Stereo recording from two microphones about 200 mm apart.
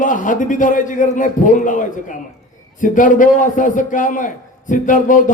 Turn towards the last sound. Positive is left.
turn(degrees=40)  # may be behind; listen again after turning